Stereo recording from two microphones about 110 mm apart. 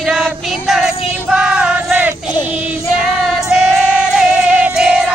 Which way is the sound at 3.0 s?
5° right (ahead or behind).